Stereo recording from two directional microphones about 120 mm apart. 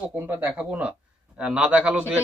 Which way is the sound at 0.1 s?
15° right (ahead or behind).